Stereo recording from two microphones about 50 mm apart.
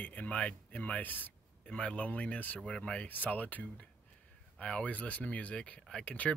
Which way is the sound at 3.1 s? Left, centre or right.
Left.